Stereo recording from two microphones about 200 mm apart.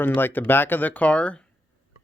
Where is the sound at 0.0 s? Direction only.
10° left (ahead or behind).